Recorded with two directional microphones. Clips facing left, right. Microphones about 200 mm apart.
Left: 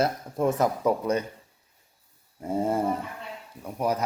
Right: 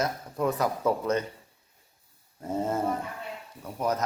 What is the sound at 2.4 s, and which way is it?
Dog, 10° left (ahead or behind).